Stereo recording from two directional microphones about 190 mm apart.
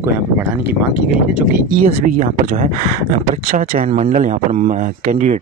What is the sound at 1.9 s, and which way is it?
Speech, 45° right (ahead or behind).